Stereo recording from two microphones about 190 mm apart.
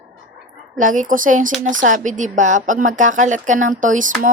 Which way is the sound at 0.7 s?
45° right (ahead or behind).